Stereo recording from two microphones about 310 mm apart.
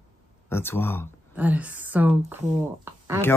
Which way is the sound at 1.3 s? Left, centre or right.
Centre.